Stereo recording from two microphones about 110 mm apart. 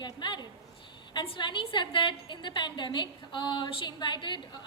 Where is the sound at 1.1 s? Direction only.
50° left (ahead or behind).